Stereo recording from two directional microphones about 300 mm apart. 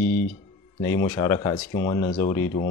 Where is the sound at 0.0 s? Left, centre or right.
Centre.